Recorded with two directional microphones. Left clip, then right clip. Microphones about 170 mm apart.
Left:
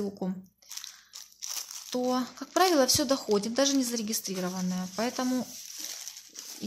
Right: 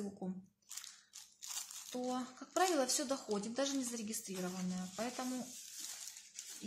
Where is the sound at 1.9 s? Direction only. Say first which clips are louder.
Left 12 dB; 40° left (ahead or behind).